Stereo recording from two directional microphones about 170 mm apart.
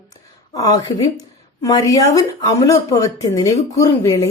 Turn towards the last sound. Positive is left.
turn(degrees=20)  # may be behind; listen again after turning